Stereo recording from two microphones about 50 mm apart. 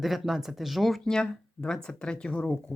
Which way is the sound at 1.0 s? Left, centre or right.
Centre.